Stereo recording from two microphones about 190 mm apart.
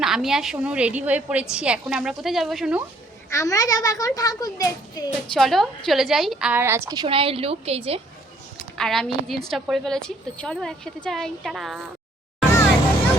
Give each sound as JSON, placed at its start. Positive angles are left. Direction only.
{"t": 0.0, "sound": "a woman's voice", "side_deg": 0}
{"t": 3.2, "sound": "a child's voice", "side_deg": 15}
{"t": 5.3, "sound": "a woman's voice", "side_deg": 0}
{"t": 8.8, "sound": "a woman's voice", "side_deg": 0}